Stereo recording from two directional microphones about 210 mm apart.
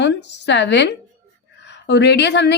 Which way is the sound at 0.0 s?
55° left (ahead or behind).